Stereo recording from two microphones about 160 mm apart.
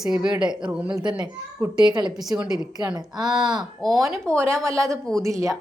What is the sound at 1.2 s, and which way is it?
Speech, 25° right (ahead or behind).